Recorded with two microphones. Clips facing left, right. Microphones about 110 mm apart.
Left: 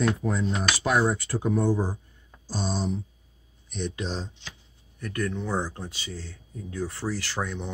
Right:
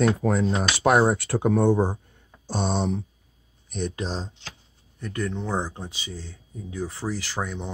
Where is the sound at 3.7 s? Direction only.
40° right (ahead or behind).